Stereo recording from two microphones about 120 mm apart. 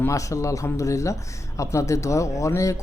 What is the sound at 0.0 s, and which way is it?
Speech, 25° left (ahead or behind).